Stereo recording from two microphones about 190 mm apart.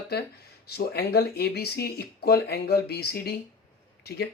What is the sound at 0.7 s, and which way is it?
Speech, 55° left (ahead or behind).